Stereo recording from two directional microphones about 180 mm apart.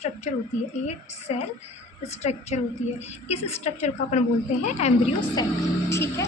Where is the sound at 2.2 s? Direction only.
40° left (ahead or behind).